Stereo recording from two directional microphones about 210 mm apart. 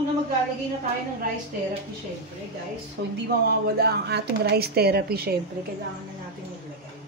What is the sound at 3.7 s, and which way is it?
Speech, 50° right (ahead or behind).